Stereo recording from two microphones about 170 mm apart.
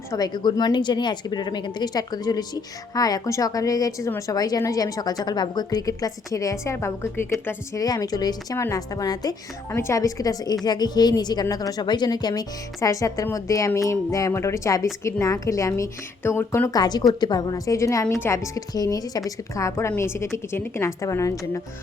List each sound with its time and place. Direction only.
0.1 s a woman's voice: 25° left (ahead or behind)